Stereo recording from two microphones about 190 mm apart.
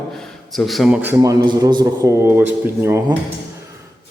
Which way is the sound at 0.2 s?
Centre (ahead or behind).